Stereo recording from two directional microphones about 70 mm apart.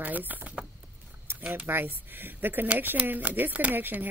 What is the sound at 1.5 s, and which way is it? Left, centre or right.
Speech, right.